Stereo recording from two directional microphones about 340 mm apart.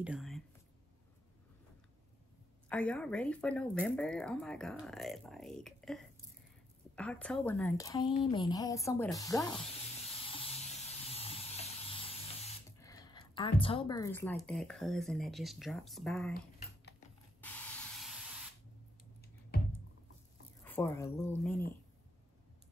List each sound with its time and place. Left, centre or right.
0.0 s speech: centre
2.7 s a woman's voice: centre
10.2 s steam: centre
11.1 s spray: centre
17.4 s spray: centre
20.6 s a woman's voice: centre